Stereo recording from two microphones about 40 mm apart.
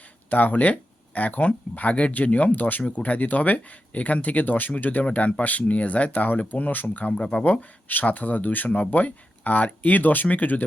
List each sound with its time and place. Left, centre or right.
0.3 s speech: left
7.1 s speech: left
7.4 s speech: left